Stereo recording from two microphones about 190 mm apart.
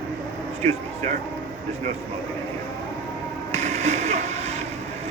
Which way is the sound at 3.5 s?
35° right (ahead or behind).